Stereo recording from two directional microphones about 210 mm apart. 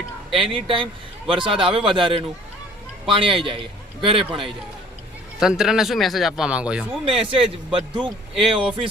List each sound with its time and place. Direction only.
0.3 s speech: centre (ahead or behind)
1.3 s a man's voice: 25° right (ahead or behind)
5.4 s speech: centre (ahead or behind)
7.0 s a man's voice: 25° right (ahead or behind)